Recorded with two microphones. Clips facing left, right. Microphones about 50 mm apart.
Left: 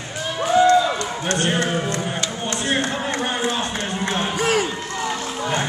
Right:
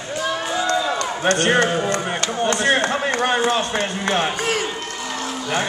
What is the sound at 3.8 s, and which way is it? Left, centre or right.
Speech, right.